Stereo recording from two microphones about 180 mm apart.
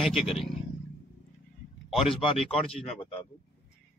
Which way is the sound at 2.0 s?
30° left (ahead or behind).